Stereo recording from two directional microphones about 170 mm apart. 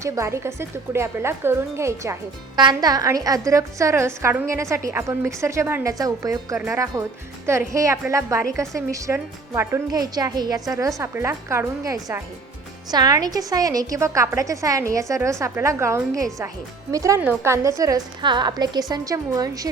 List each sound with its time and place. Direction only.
0.0 s a woman's voice: 15° right (ahead or behind)